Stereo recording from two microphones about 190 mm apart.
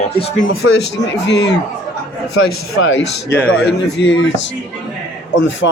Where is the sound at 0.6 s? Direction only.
90° left.